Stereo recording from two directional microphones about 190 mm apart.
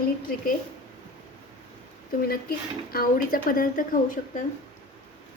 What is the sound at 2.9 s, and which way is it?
Speech, 50° left (ahead or behind).